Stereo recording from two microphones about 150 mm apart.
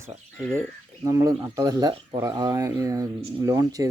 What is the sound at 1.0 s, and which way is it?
Speech, 20° right (ahead or behind).